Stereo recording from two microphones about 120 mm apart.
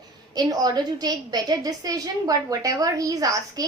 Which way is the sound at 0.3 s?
35° right (ahead or behind).